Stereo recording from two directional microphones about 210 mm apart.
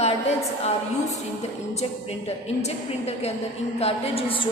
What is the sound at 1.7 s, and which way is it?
A woman's voice, 30° left (ahead or behind).